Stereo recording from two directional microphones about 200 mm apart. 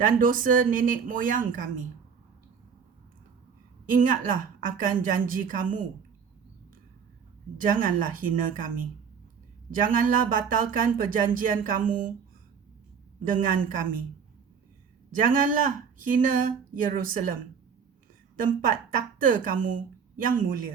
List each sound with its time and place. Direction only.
0.0 s a woman's voice: 45° right (ahead or behind)
3.8 s a woman's voice: 40° right (ahead or behind)
7.8 s a woman's voice: 40° right (ahead or behind)
13.4 s a woman's voice: 40° right (ahead or behind)
15.1 s a woman's voice: 40° right (ahead or behind)
18.4 s a woman's voice: 40° right (ahead or behind)